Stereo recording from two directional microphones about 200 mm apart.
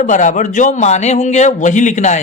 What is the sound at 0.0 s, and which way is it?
Speech, 40° left (ahead or behind).